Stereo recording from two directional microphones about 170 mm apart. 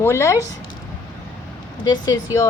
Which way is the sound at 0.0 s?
15° left (ahead or behind).